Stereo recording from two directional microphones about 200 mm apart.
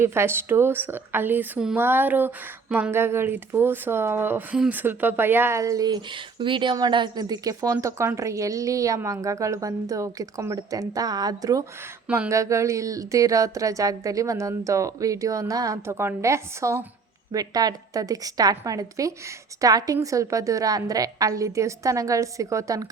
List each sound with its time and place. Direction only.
0.0 s a woman's voice: 10° right (ahead or behind)
12.0 s a woman's voice: 5° right (ahead or behind)